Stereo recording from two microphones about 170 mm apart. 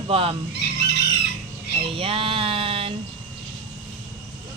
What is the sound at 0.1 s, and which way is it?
Speech, 35° right (ahead or behind).